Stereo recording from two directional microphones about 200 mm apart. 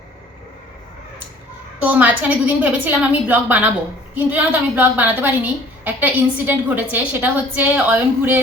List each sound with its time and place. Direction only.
1.8 s a woman's voice: 10° right (ahead or behind)